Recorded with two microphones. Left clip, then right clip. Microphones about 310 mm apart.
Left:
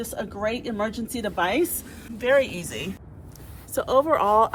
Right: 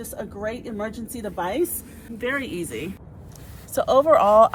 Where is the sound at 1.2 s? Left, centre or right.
Left.